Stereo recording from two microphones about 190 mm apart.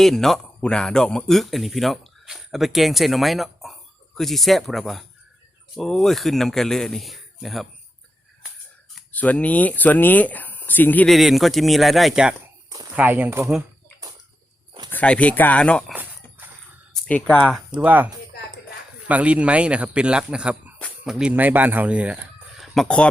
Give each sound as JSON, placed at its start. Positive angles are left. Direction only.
{"t": 0.0, "sound": "speech", "side_deg": 0}
{"t": 9.0, "sound": "speech", "side_deg": 10}
{"t": 14.8, "sound": "speech", "side_deg": 10}
{"t": 15.9, "sound": "a sound", "side_deg": -10}
{"t": 16.9, "sound": "speech", "side_deg": 5}
{"t": 17.7, "sound": "speech", "side_deg": -10}